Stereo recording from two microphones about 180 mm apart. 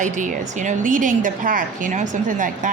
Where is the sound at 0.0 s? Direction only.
45° right (ahead or behind).